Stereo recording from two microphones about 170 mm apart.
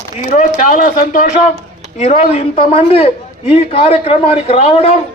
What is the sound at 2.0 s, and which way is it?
A man's voice, 40° left (ahead or behind).